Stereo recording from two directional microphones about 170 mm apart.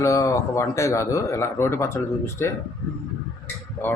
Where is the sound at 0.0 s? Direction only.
20° left (ahead or behind).